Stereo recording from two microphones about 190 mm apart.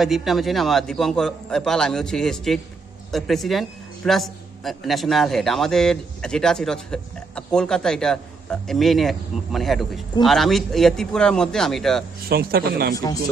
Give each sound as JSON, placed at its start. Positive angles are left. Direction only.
{"t": 0.0, "sound": "a man's voice", "side_deg": 0}
{"t": 12.3, "sound": "speech", "side_deg": -55}
{"t": 12.9, "sound": "speech", "side_deg": 20}